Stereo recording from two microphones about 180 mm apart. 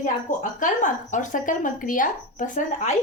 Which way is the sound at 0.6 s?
45° left (ahead or behind).